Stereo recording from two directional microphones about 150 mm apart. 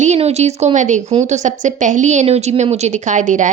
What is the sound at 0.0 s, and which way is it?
A woman's voice, 45° right (ahead or behind).